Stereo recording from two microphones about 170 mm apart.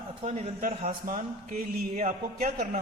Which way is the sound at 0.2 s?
40° right (ahead or behind).